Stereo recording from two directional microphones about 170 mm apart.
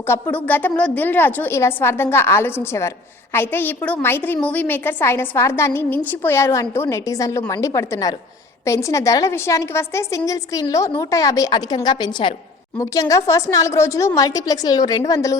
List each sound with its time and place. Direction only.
0.1 s a woman's voice: 10° left (ahead or behind)